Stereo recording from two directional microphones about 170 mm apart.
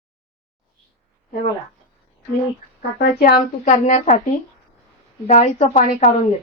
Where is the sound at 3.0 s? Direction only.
65° left (ahead or behind); by 4.2 s 45° left (ahead or behind).